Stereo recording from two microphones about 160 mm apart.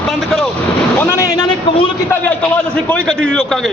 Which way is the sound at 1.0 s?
15° left (ahead or behind).